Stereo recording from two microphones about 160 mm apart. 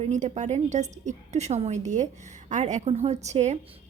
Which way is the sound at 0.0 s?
45° right (ahead or behind).